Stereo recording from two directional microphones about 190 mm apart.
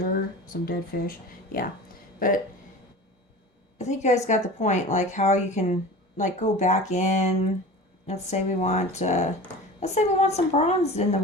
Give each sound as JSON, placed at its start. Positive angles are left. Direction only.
{"t": 0.0, "sound": "speech", "side_deg": 50}
{"t": 2.1, "sound": "speech", "side_deg": 45}
{"t": 3.8, "sound": "a woman's voice", "side_deg": 35}